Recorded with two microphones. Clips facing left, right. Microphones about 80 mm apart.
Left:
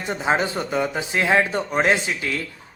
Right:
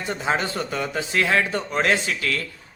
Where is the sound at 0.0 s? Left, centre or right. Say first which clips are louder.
Left 3 dB; left.